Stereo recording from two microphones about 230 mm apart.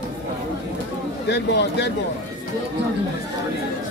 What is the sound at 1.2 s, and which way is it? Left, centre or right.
Speech, left.